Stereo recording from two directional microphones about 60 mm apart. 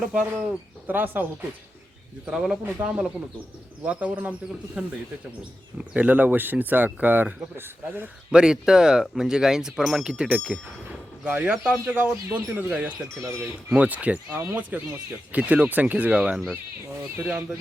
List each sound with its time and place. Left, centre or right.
0.0 s speech: centre
0.9 s speech: right
2.3 s speech: centre
2.8 s speech: right
3.8 s speech: right
8.3 s speech: centre; by 17.4 s right